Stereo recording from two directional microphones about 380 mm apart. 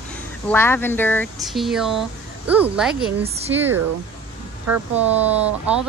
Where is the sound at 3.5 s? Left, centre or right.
Centre.